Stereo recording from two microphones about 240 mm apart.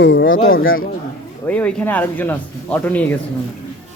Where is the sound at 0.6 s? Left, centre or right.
Left.